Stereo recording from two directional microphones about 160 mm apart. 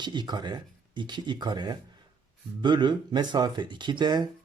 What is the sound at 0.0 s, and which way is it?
Speech, 30° right (ahead or behind).